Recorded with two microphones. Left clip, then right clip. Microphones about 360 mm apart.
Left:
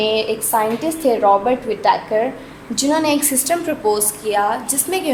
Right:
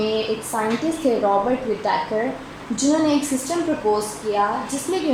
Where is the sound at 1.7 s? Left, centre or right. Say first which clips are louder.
Left 2 dB; left.